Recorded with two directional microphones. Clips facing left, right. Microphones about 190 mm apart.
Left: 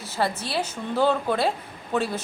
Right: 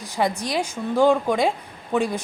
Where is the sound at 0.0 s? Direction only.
15° right (ahead or behind).